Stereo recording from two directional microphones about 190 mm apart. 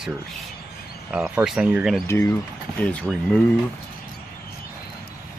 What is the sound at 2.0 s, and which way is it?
Speech, 15° left (ahead or behind).